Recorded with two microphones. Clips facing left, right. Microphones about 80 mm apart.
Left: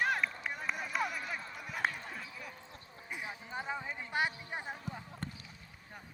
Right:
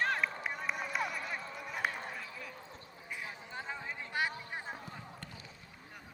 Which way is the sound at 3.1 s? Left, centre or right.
Centre.